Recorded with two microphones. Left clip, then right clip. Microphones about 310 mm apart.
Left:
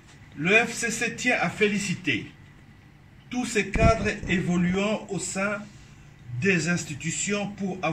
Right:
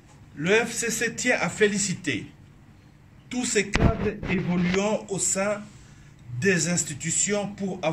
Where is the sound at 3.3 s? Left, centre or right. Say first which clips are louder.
Right 1 dB; centre.